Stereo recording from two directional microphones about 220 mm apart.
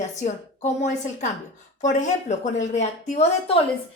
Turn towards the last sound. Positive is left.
turn(degrees=30)  # may be behind; listen again after turning